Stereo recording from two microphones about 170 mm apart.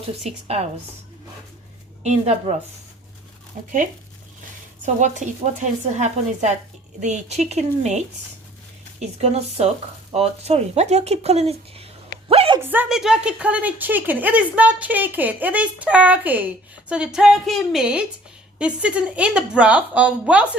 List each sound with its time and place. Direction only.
0.1 s speech: 35° right (ahead or behind)
2.0 s speech: 40° right (ahead or behind)
3.6 s speech: 50° right (ahead or behind)
4.9 s speech: 45° right (ahead or behind)
12.3 s a sound: 35° right (ahead or behind)
12.5 s a woman's voice: 10° right (ahead or behind)